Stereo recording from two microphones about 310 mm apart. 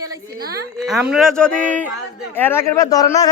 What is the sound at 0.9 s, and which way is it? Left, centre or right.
A man's voice, centre.